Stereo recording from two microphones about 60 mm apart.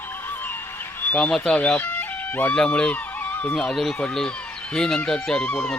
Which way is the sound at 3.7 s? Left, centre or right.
Centre.